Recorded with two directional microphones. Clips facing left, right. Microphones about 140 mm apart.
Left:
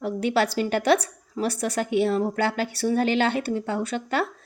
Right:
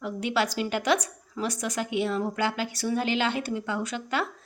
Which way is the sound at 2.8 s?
45° left (ahead or behind).